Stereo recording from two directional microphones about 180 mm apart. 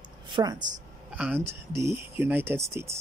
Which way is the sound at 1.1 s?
5° right (ahead or behind).